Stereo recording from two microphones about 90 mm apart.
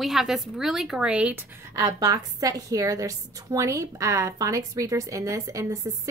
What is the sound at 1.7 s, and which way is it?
A woman's voice, 40° right (ahead or behind).